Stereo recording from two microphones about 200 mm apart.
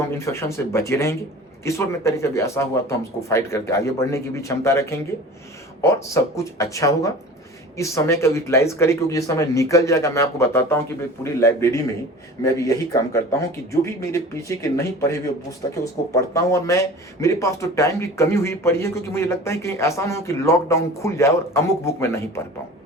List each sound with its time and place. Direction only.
0.3 s speech: 15° left (ahead or behind)